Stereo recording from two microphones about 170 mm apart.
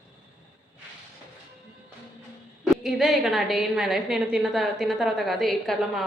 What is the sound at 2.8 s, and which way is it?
A woman's voice, centre (ahead or behind).